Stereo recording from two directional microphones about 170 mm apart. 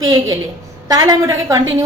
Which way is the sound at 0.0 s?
20° right (ahead or behind).